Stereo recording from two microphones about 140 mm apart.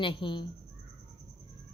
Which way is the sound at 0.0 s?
35° left (ahead or behind).